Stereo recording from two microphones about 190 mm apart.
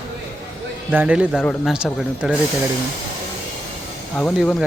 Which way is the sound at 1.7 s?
5° right (ahead or behind).